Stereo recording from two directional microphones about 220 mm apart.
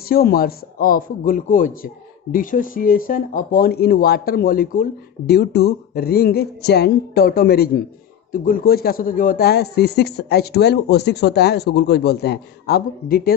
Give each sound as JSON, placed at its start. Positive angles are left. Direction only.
{"t": 0.1, "sound": "a man's voice", "side_deg": 45}